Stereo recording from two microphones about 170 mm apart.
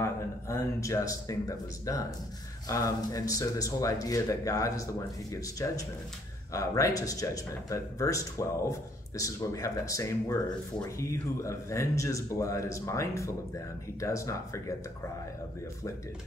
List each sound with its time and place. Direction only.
0.0 s speech: 15° left (ahead or behind)